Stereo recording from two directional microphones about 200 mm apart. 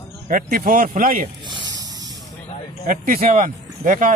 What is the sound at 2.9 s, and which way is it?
Speech, 45° right (ahead or behind).